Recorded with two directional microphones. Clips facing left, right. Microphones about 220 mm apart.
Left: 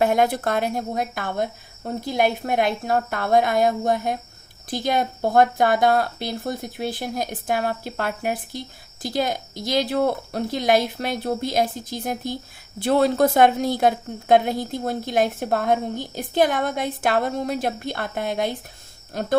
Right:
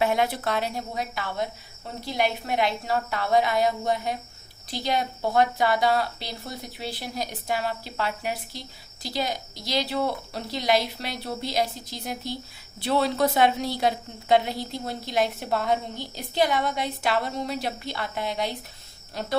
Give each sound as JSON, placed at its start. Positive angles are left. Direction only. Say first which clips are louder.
{"t": 0.0, "sound": "a woman's voice", "louder": "left 5 dB", "side_deg": 45}